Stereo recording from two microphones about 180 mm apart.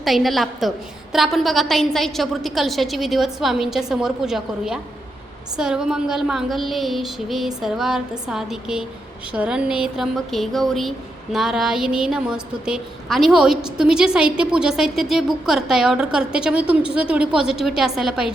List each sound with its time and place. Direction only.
0.0 s speech: centre (ahead or behind)